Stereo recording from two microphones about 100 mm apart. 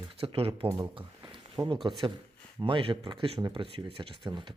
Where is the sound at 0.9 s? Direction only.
55° right (ahead or behind).